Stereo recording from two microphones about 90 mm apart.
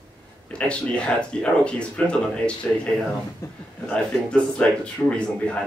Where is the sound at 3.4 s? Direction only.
30° left (ahead or behind).